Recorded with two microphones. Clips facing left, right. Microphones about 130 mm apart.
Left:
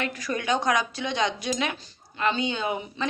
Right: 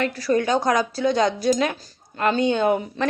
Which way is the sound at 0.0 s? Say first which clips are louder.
Right 8 dB; 35° right (ahead or behind).